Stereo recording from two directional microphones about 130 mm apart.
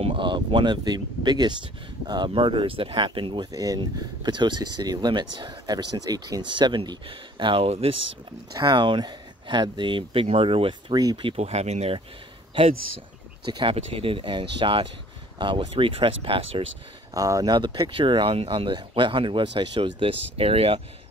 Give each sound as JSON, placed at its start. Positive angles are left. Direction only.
{"t": 0.0, "sound": "speech", "side_deg": -40}
{"t": 3.5, "sound": "speech", "side_deg": -30}
{"t": 8.5, "sound": "speech", "side_deg": -35}
{"t": 11.3, "sound": "speech", "side_deg": -55}
{"t": 13.5, "sound": "speech", "side_deg": -40}
{"t": 17.1, "sound": "speech", "side_deg": -25}